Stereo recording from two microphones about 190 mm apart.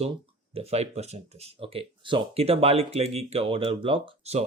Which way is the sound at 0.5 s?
35° right (ahead or behind).